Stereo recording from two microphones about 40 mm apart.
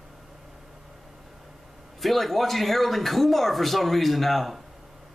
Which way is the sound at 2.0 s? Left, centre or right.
Centre.